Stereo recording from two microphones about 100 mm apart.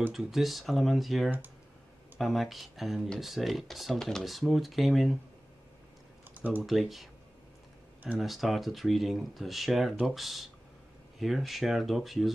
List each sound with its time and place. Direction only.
0.1 s speech: 5° right (ahead or behind)
6.3 s typing: 20° right (ahead or behind)
6.6 s speech: centre (ahead or behind)
8.2 s speech: centre (ahead or behind)